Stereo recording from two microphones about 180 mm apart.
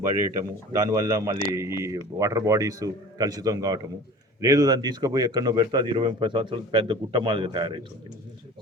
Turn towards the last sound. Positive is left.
turn(degrees=-25)  # may be behind; listen again after turning